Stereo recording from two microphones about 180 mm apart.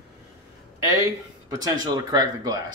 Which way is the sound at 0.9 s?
20° right (ahead or behind).